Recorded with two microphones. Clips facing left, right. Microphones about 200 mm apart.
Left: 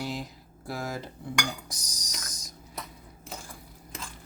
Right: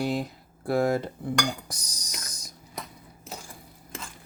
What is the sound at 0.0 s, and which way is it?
Speech, 60° right (ahead or behind).